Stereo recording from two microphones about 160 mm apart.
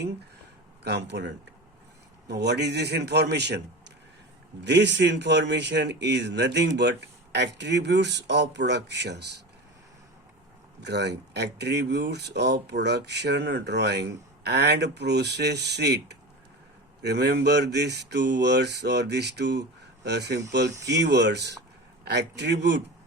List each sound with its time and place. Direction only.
0.9 s speech: 90° right
10.8 s speech: 90° right
20.7 s speech: 20° right (ahead or behind)
20.9 s speech: 90° right